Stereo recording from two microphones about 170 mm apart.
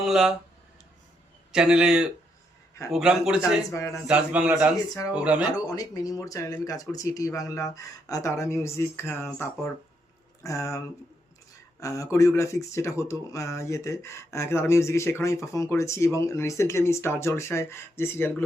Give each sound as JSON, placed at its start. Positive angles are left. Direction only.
{"t": 0.1, "sound": "a man's voice", "side_deg": -5}
{"t": 1.5, "sound": "a man's voice", "side_deg": -5}
{"t": 3.7, "sound": "speech", "side_deg": 15}
{"t": 4.0, "sound": "a man's voice", "side_deg": -5}
{"t": 5.5, "sound": "speech", "side_deg": 20}
{"t": 11.8, "sound": "speech", "side_deg": 20}